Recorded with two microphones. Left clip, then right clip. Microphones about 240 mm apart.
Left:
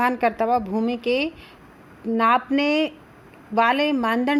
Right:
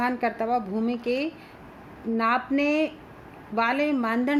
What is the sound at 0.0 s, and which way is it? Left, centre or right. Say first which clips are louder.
A woman's voice: left 5 dB; left.